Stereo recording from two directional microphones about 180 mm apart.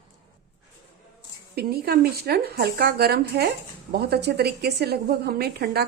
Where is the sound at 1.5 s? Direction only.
60° right (ahead or behind).